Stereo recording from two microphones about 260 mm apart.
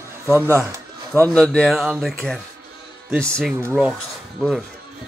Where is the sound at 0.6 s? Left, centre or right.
Centre.